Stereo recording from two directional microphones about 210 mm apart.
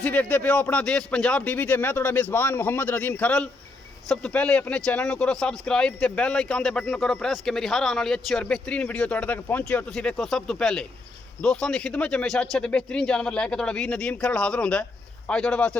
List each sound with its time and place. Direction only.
0.0 s speech: 5° left (ahead or behind)